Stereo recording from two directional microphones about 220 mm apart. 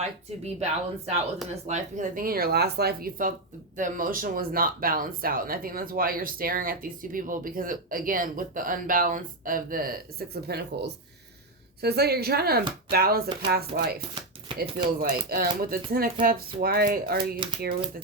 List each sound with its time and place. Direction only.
0.4 s speech: 30° right (ahead or behind)